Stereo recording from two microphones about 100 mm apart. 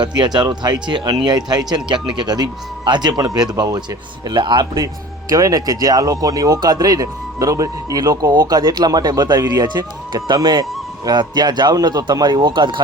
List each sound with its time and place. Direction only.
0.0 s speech: 45° right (ahead or behind)
5.3 s speech: 35° right (ahead or behind); by 12.8 s 50° right (ahead or behind)